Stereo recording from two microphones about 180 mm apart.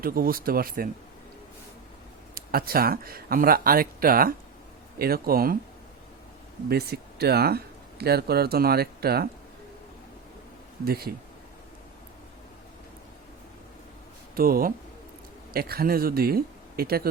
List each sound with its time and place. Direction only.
0.0 s speech: 55° right (ahead or behind)
2.3 s speech: 55° right (ahead or behind)
6.7 s speech: 60° right (ahead or behind)
10.8 s speech: 60° right (ahead or behind)
14.3 s speech: 55° right (ahead or behind)